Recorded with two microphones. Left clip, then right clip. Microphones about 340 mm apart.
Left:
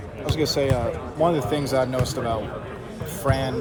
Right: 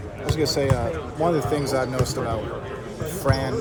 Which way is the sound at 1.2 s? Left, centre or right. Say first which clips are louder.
Right 1 dB; centre.